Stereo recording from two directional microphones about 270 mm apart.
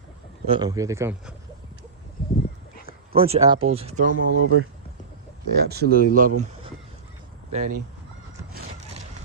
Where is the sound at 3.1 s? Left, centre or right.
Right.